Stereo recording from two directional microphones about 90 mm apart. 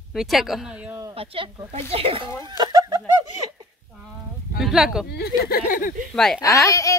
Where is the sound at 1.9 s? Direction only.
90° right.